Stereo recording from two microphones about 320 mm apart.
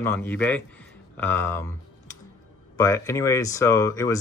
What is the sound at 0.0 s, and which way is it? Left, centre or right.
A man's voice, centre.